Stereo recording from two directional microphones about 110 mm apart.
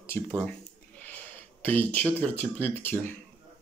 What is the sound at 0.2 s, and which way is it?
Speech, 15° left (ahead or behind).